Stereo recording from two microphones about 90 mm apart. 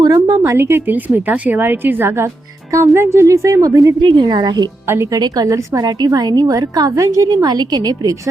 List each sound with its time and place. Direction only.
0.0 s a woman's voice: 40° right (ahead or behind)
4.0 s a woman's voice: 60° right (ahead or behind); by 7.3 s 40° right (ahead or behind)
7.4 s a woman's voice: 50° right (ahead or behind)